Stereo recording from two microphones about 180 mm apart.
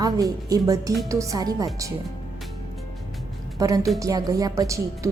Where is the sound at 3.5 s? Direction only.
20° right (ahead or behind).